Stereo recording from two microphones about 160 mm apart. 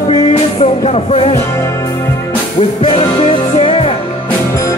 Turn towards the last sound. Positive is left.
turn(degrees=40)  # may be behind; listen again after turning